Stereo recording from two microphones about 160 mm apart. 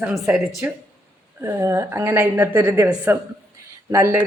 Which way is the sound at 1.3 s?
15° right (ahead or behind).